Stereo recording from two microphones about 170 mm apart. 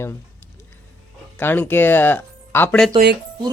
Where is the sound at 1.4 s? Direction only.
10° left (ahead or behind).